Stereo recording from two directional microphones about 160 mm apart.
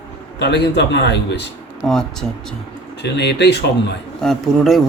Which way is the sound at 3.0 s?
90° left.